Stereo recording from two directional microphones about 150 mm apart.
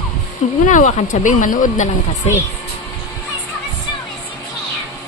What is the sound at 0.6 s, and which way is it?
A woman's voice, 60° left (ahead or behind).